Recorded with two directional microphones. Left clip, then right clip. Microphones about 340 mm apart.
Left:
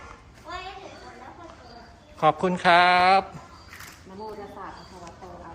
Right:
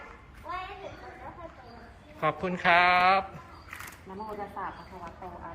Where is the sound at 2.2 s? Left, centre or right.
Centre.